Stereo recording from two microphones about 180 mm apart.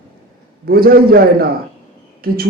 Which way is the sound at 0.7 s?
55° right (ahead or behind).